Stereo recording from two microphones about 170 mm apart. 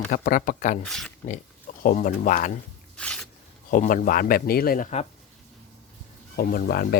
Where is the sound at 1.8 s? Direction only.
50° left (ahead or behind).